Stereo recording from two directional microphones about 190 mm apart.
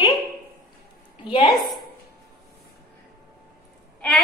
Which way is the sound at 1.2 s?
25° left (ahead or behind).